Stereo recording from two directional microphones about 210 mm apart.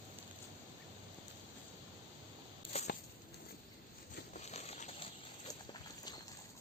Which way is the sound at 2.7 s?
30° left (ahead or behind).